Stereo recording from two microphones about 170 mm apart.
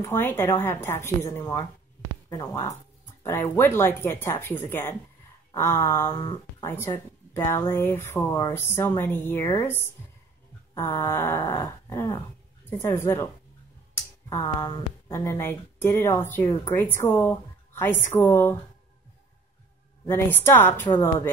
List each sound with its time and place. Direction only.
0.0 s speech: 15° left (ahead or behind)
10.7 s speech: 15° left (ahead or behind)
20.1 s speech: 15° left (ahead or behind)